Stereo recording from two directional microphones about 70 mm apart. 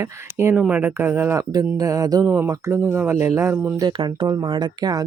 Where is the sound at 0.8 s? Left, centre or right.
Right.